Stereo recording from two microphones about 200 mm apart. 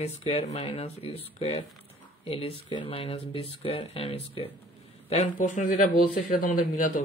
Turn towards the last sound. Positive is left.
turn(degrees=40)  # may be behind; listen again after turning